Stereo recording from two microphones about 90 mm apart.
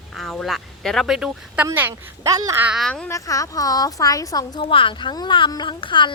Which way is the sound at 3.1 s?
40° left (ahead or behind).